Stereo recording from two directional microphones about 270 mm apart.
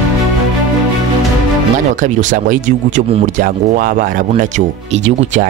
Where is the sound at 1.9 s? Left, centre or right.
Right.